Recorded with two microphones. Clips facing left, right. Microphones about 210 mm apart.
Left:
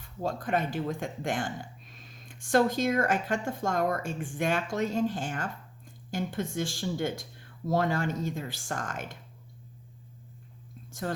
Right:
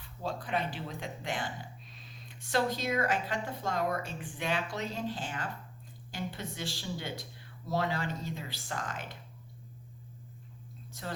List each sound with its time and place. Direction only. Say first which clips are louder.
0.2 s speech: left 5 dB; 45° left (ahead or behind)
10.9 s speech: left 7 dB; 50° left (ahead or behind)